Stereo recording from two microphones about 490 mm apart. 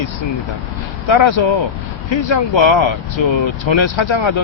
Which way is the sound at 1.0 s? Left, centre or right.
Left.